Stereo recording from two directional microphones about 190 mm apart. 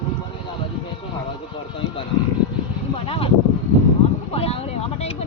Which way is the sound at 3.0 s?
30° left (ahead or behind).